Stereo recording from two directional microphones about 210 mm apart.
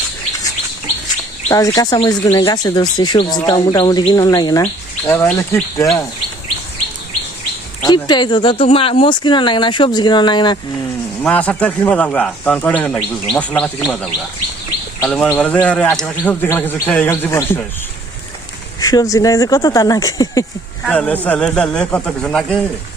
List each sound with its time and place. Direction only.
1.5 s speech: 15° left (ahead or behind)
7.8 s speech: 20° left (ahead or behind)
11.2 s a man's voice: 5° left (ahead or behind)
18.8 s speech: 15° left (ahead or behind)
20.8 s a man's voice: 5° left (ahead or behind)